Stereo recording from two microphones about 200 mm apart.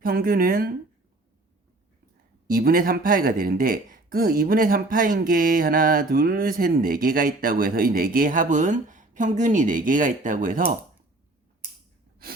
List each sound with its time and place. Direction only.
0.0 s speech: 45° right (ahead or behind)
2.5 s speech: 45° right (ahead or behind)